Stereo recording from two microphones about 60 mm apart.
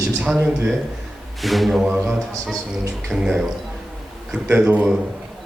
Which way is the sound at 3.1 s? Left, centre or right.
Centre.